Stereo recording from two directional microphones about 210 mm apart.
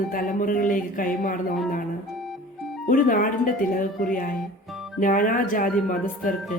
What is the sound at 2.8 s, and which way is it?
Speech, 40° left (ahead or behind).